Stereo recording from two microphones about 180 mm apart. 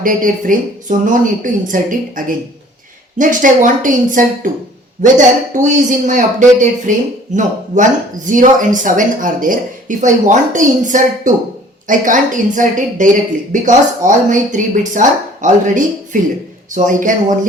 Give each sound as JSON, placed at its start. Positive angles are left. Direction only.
{"t": 0.0, "sound": "a woman's voice", "side_deg": -50}